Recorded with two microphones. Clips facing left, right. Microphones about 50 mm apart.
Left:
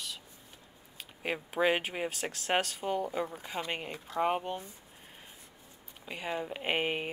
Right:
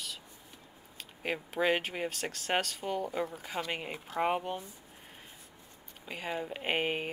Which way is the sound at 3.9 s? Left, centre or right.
Right.